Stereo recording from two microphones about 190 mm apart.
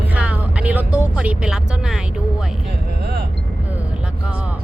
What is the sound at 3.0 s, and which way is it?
Speech, 60° right (ahead or behind).